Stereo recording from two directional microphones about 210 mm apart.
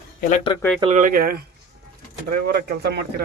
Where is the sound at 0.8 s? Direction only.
35° right (ahead or behind); by 3.0 s 50° right (ahead or behind).